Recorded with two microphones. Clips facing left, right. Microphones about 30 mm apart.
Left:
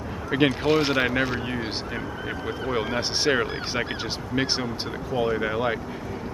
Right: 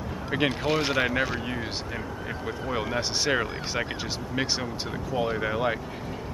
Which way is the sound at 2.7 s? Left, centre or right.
Centre.